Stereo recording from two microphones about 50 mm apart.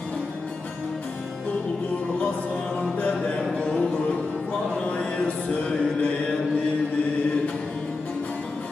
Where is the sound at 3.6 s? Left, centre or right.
Centre.